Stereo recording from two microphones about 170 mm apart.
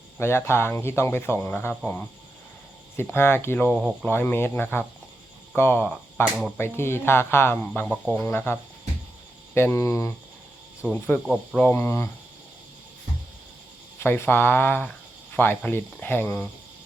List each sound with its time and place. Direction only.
0.2 s speech: 15° left (ahead or behind)
3.7 s speech: 5° right (ahead or behind)
4.1 s speech: 10° left (ahead or behind)
9.6 s speech: 15° left (ahead or behind)
14.0 s speech: 15° left (ahead or behind)